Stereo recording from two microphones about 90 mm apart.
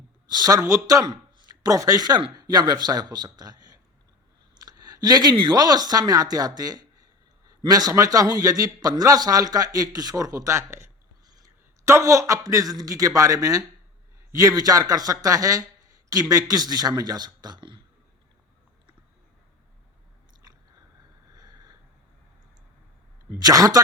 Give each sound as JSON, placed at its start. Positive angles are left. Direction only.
{"t": 0.3, "sound": "a man's voice", "side_deg": -45}
{"t": 21.3, "sound": "a sound", "side_deg": -45}
{"t": 23.4, "sound": "speech", "side_deg": -40}